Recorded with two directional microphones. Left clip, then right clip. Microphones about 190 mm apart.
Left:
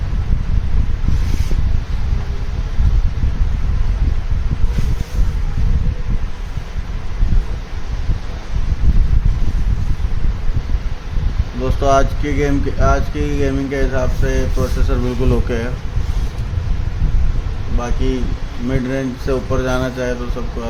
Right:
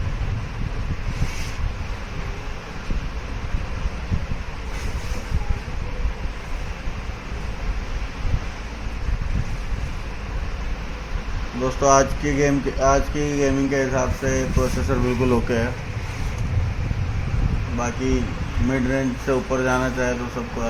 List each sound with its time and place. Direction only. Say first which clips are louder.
11.8 s speech: left 2 dB; 15° left (ahead or behind)
17.7 s speech: left 2 dB; 15° left (ahead or behind)